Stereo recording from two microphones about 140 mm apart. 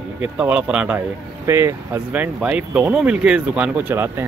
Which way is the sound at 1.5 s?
20° right (ahead or behind).